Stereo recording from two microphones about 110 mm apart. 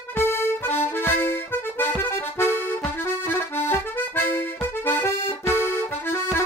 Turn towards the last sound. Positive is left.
turn(degrees=20)  # may be behind; listen again after turning